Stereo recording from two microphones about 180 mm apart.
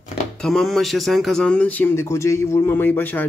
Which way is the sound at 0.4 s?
5° left (ahead or behind).